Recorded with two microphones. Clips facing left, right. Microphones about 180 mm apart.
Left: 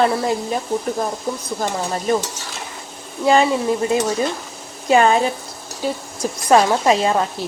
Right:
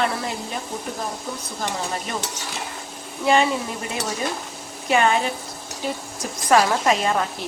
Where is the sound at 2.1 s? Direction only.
40° left (ahead or behind).